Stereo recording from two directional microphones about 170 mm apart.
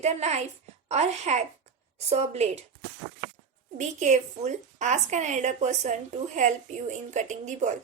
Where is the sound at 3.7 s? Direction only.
45° right (ahead or behind).